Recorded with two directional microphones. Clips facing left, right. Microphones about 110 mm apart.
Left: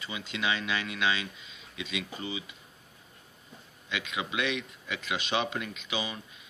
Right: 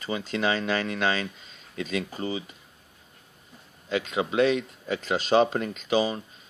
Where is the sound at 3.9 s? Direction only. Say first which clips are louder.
Right 8 dB; 35° right (ahead or behind).